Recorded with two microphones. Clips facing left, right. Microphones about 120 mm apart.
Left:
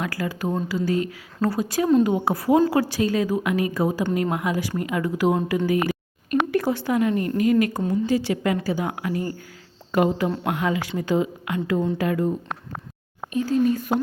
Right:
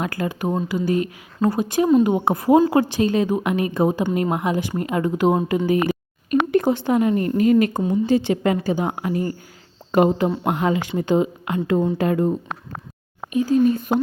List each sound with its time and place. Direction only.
0.0 s a woman's voice: 25° right (ahead or behind)
13.3 s speech: 15° right (ahead or behind)